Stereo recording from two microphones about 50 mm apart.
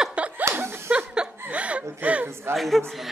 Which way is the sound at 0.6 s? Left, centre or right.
Right.